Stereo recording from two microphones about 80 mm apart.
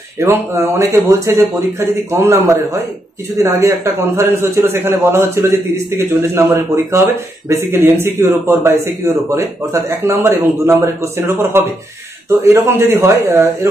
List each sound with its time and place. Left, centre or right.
0.3 s speech: right
2.4 s a man's voice: right
3.4 s speech: right